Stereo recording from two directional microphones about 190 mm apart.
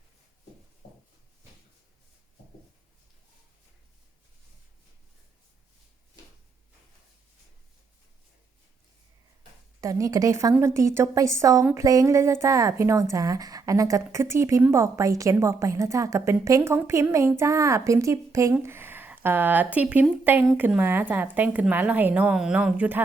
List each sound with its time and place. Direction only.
9.8 s a woman's voice: 15° right (ahead or behind)